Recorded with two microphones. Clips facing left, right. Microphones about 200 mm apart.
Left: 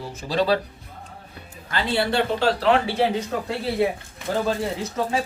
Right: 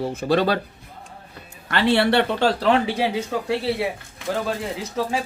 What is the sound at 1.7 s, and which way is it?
Speech, 70° right (ahead or behind).